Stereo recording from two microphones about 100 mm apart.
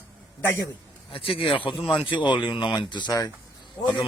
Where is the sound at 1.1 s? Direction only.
65° left (ahead or behind); by 3.3 s 35° left (ahead or behind).